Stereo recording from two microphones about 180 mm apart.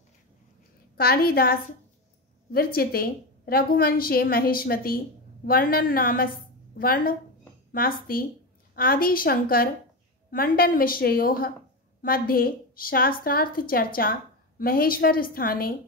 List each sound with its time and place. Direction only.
0.9 s a woman's voice: 55° left (ahead or behind)